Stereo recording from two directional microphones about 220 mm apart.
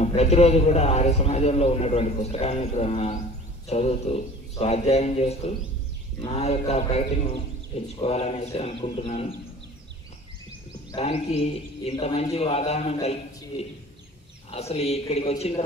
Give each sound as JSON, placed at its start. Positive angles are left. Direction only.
{"t": 0.0, "sound": "a man's voice", "side_deg": 30}
{"t": 10.9, "sound": "a man's voice", "side_deg": 30}
{"t": 14.5, "sound": "a man's voice", "side_deg": 30}